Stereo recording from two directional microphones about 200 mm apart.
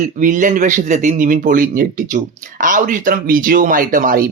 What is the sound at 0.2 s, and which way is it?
Speech, 40° right (ahead or behind).